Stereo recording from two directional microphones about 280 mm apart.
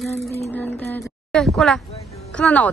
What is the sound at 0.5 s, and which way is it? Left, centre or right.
Speech, centre.